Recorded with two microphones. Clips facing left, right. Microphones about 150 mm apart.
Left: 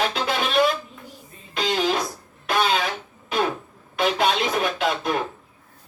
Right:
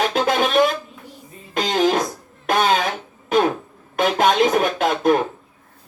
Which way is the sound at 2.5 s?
45° right (ahead or behind).